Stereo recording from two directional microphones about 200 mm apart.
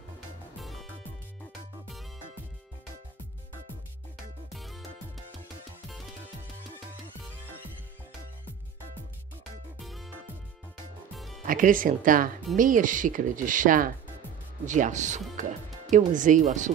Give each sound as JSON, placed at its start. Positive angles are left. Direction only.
{"t": 0.6, "sound": "music", "side_deg": 0}
{"t": 4.5, "sound": "music", "side_deg": 0}
{"t": 9.8, "sound": "music", "side_deg": 0}
{"t": 11.4, "sound": "speech", "side_deg": -45}